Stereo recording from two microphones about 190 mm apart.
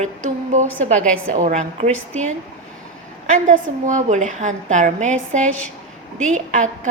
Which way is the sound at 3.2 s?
40° right (ahead or behind).